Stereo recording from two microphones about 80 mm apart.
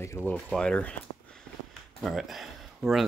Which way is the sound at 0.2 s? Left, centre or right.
Left.